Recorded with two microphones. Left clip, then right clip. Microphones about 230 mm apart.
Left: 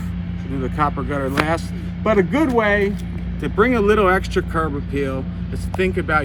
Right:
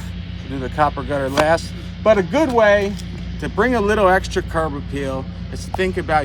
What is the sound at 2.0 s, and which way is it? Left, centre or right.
Speech, right.